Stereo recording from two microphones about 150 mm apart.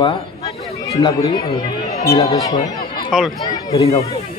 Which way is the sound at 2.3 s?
20° left (ahead or behind).